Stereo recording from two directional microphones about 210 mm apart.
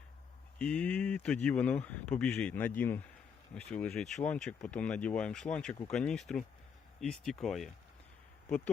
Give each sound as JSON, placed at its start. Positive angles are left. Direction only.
{"t": 0.6, "sound": "speech", "side_deg": 5}